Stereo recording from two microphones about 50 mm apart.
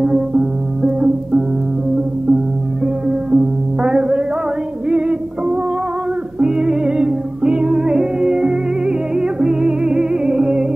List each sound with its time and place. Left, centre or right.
0.0 s music: centre
3.1 s music: centre